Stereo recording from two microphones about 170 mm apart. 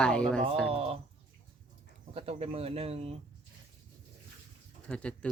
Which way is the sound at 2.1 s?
35° right (ahead or behind).